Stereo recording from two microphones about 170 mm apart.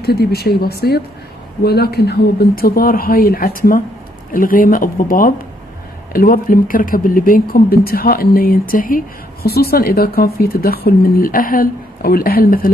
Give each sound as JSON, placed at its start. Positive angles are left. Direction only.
{"t": 0.0, "sound": "speech", "side_deg": 70}